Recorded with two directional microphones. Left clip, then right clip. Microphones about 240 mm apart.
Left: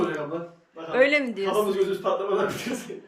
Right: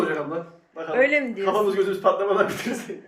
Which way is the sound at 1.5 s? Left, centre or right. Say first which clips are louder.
Right 3 dB; centre.